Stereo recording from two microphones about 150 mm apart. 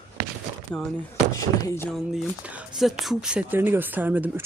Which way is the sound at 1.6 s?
15° left (ahead or behind).